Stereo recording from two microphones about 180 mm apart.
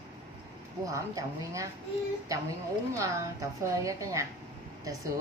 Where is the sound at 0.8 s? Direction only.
20° right (ahead or behind).